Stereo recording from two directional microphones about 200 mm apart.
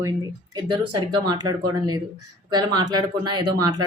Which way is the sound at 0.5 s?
20° right (ahead or behind).